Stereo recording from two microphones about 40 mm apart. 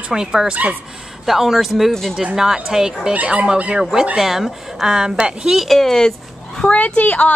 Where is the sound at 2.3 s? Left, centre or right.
Centre.